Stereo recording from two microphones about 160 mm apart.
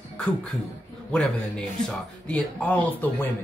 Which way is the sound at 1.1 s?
5° left (ahead or behind).